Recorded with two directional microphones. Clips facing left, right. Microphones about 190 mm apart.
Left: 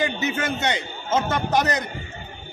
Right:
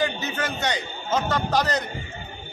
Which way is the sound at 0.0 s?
20° left (ahead or behind).